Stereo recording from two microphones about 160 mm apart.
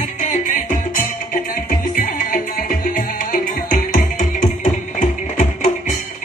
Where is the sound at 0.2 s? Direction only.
55° left (ahead or behind).